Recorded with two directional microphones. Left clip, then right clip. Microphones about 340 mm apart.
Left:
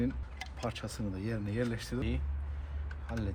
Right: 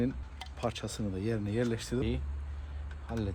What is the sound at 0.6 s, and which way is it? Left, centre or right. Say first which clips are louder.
Speech: right 4 dB; right.